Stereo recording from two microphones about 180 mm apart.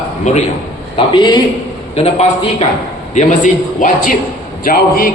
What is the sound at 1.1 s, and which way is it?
A man's voice, 25° left (ahead or behind).